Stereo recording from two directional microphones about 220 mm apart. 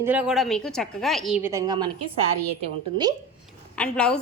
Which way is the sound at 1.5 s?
15° right (ahead or behind).